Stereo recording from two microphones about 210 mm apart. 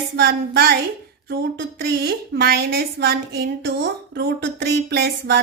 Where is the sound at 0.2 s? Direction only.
50° right (ahead or behind).